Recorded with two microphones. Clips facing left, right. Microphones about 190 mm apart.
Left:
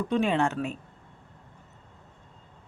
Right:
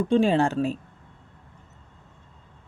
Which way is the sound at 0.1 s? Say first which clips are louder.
Right 5 dB; 30° right (ahead or behind).